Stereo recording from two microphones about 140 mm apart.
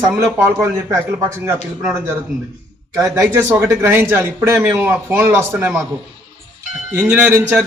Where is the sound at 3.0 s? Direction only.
20° right (ahead or behind).